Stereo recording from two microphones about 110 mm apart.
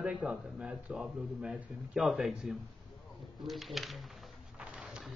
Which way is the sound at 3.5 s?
Centre (ahead or behind).